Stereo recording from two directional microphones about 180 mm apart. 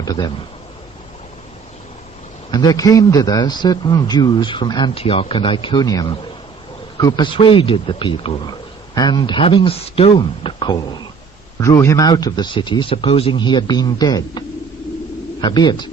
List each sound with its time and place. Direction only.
0.0 s speech: 20° left (ahead or behind)
2.5 s a man's voice: 20° left (ahead or behind)